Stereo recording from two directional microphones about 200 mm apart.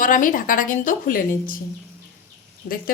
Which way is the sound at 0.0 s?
40° left (ahead or behind).